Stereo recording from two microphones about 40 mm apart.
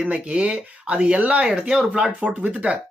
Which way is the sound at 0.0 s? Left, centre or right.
Right.